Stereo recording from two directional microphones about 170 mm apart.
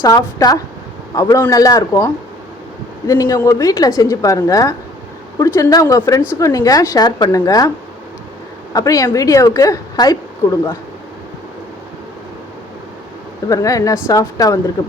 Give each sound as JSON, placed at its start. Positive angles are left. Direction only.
{"t": 0.0, "sound": "a woman's voice", "side_deg": 20}
{"t": 3.1, "sound": "a woman's voice", "side_deg": 20}
{"t": 8.7, "sound": "a woman's voice", "side_deg": 20}
{"t": 13.5, "sound": "a woman's voice", "side_deg": 20}